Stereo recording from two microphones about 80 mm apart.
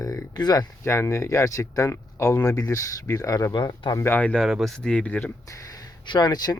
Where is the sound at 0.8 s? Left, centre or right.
Left.